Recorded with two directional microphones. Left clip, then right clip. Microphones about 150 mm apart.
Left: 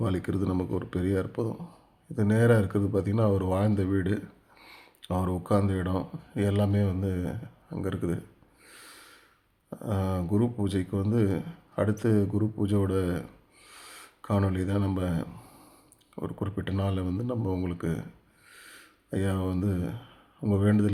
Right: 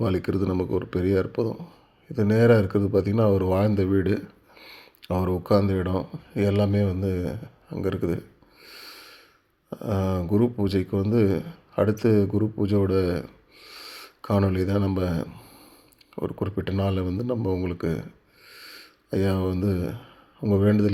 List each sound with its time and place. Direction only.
0.0 s speech: 20° right (ahead or behind)
8.6 s sniff: 20° right (ahead or behind)
9.6 s speech: 20° right (ahead or behind)